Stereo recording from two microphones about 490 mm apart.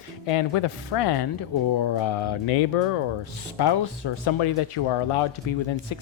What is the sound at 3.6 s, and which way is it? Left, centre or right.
Speech, left.